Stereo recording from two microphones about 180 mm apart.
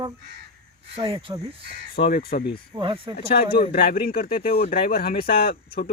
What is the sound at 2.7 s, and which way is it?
Speech, 30° right (ahead or behind).